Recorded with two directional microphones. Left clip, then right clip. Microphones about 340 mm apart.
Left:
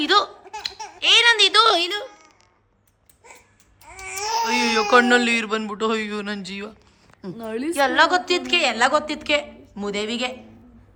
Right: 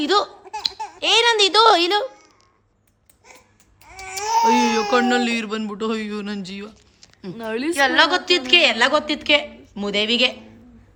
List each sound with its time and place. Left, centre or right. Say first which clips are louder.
0.0 s laughter: left 1 dB; centre
0.9 s a child's voice: left 1 dB; centre
3.9 s babbling: right 1 dB; left
4.5 s a woman's voice: left 1 dB; centre